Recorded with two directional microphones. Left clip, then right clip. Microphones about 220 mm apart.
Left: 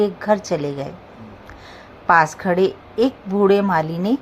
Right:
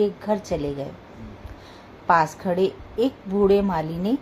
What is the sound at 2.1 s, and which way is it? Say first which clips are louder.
A woman's voice: left 4 dB; 15° left (ahead or behind).